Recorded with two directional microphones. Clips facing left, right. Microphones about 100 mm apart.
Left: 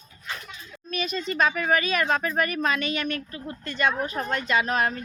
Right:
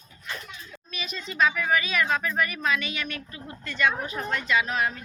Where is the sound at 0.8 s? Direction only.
50° left (ahead or behind).